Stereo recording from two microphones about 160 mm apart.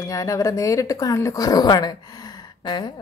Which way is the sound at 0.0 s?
20° left (ahead or behind).